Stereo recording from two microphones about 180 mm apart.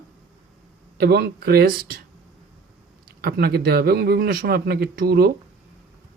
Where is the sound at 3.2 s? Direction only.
60° right (ahead or behind).